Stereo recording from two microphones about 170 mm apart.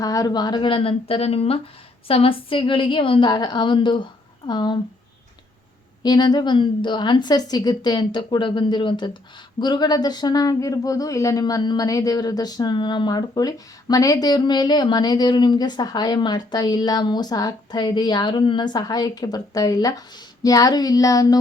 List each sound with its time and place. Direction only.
0.0 s speech: 20° left (ahead or behind)
6.0 s speech: 25° left (ahead or behind)